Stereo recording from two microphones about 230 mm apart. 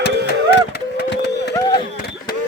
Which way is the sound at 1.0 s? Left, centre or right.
Left.